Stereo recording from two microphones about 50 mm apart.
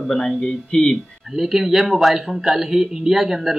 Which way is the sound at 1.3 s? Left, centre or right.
Centre.